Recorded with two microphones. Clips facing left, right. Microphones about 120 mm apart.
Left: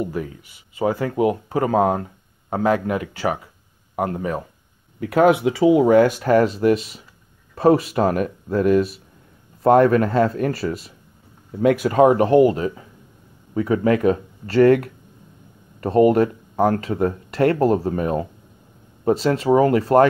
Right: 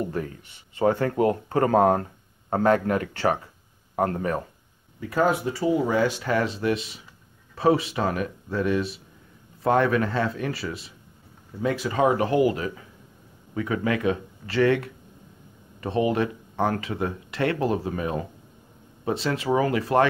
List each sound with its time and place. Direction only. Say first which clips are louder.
0.0 s speech: left 3 dB; 10° left (ahead or behind)
5.0 s speech: left 7 dB; 80° left; by 10.9 s 45° left (ahead or behind)
11.6 s speech: left 8 dB; 55° left (ahead or behind)
12.5 s speech: left 6 dB; 30° left (ahead or behind)